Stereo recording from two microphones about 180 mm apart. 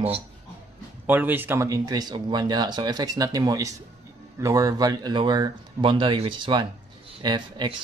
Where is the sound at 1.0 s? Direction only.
10° right (ahead or behind).